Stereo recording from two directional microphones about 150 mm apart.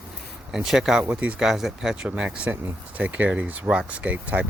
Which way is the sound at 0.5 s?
5° right (ahead or behind).